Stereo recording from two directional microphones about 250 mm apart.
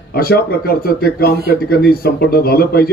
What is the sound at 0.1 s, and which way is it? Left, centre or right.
A man's voice, left.